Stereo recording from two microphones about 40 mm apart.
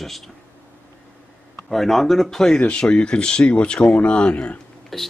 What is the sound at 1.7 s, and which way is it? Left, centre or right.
Speech, centre.